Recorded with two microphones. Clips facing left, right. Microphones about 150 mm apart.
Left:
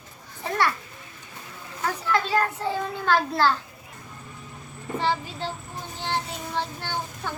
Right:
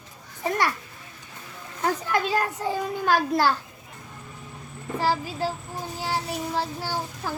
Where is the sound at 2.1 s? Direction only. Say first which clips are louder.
Left 5 dB; 15° right (ahead or behind).